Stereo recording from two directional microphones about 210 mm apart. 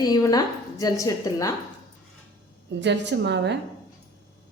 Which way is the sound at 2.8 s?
55° right (ahead or behind).